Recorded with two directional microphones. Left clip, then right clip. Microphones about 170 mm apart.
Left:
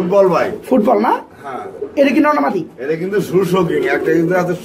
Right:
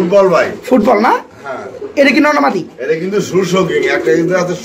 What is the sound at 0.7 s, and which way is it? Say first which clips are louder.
Speech: right 3 dB; centre (ahead or behind).